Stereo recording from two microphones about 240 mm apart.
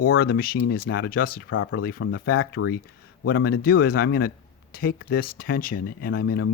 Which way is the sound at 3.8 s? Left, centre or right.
Left.